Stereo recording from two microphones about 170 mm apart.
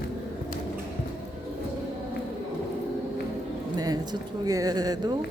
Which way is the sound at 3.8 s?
25° right (ahead or behind).